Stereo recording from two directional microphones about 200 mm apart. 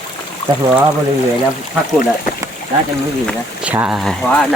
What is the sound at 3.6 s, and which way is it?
Speech, 5° right (ahead or behind).